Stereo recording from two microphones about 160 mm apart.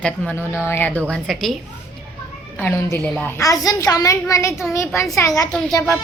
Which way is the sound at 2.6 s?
15° left (ahead or behind).